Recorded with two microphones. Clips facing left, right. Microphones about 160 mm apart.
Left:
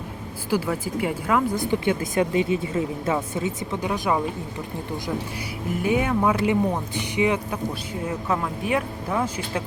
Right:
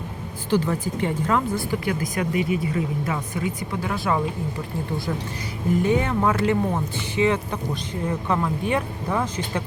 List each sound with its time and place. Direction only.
0.5 s speech: 10° left (ahead or behind)
1.5 s speech: 20° left (ahead or behind)
5.8 s speech: 10° left (ahead or behind)